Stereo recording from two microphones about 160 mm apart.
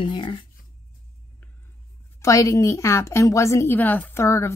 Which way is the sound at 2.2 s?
20° left (ahead or behind).